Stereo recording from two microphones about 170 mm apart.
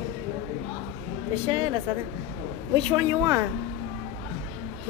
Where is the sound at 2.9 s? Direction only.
20° right (ahead or behind).